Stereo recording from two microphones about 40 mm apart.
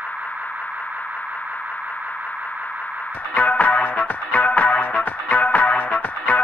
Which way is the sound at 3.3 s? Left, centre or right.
Left.